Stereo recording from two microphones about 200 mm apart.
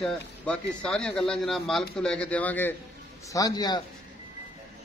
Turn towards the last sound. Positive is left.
turn(degrees=20)  # may be behind; listen again after turning